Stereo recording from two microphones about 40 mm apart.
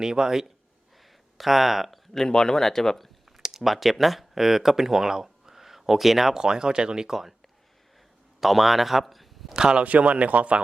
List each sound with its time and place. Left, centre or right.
0.0 s speech: centre
1.4 s speech: centre
2.1 s speech: centre
3.3 s speech: centre
6.3 s speech: centre
8.4 s speech: centre
9.6 s speech: right
9.8 s speech: right